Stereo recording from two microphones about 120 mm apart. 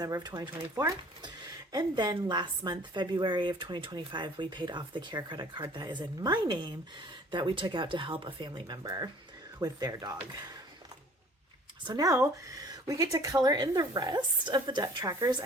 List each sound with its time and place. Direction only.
0.0 s a woman's voice: 35° right (ahead or behind)
11.9 s a woman's voice: 30° right (ahead or behind)